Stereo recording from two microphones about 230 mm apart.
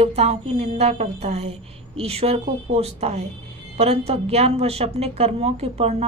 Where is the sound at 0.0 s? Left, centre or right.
Right.